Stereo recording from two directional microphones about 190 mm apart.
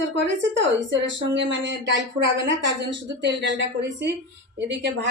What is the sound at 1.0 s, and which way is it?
Speech, 70° right (ahead or behind).